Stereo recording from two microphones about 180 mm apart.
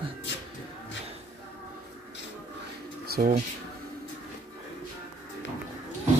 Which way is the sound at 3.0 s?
60° right (ahead or behind).